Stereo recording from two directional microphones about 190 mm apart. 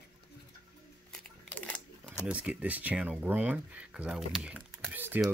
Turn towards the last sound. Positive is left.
turn(degrees=-10)  # may be behind; listen again after turning